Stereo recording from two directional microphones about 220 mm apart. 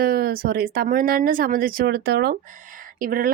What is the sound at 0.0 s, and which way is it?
Speech, 40° right (ahead or behind).